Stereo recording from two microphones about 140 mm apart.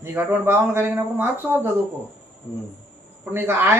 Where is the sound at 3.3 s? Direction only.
15° right (ahead or behind).